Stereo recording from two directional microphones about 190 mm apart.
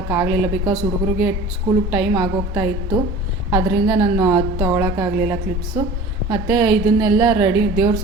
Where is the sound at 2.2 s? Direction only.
15° right (ahead or behind).